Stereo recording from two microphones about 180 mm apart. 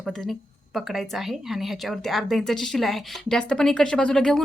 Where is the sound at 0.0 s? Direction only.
5° left (ahead or behind).